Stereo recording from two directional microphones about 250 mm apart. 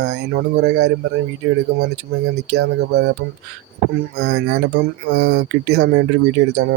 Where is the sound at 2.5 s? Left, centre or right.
Right.